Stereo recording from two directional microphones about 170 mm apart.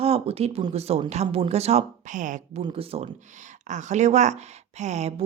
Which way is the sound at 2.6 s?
30° right (ahead or behind).